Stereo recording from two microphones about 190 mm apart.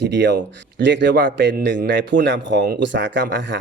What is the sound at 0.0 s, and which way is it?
A man's voice, 65° right (ahead or behind).